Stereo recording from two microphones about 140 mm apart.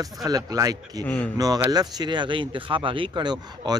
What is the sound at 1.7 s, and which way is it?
Speech, 30° right (ahead or behind).